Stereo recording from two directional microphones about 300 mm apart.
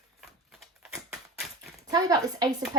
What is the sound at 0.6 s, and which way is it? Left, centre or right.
Typewriter, centre.